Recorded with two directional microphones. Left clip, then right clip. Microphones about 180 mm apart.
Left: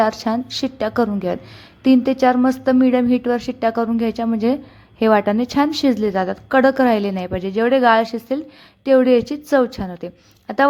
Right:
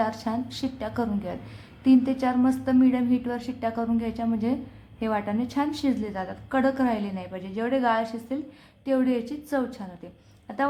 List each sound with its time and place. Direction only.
0.0 s a woman's voice: 35° left (ahead or behind)